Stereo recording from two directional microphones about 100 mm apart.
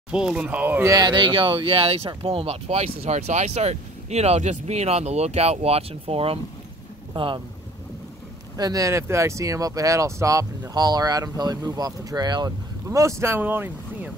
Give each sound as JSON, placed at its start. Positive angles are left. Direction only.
{"t": 0.1, "sound": "speech", "side_deg": -10}
{"t": 0.8, "sound": "speech", "side_deg": -40}
{"t": 1.1, "sound": "speech", "side_deg": -55}
{"t": 7.2, "sound": "speech", "side_deg": -60}
{"t": 8.5, "sound": "speech", "side_deg": -35}
{"t": 10.7, "sound": "speech", "side_deg": -40}
{"t": 12.9, "sound": "speech", "side_deg": -30}